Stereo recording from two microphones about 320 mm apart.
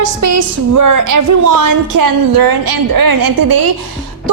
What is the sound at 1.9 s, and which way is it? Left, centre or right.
A woman's voice, right.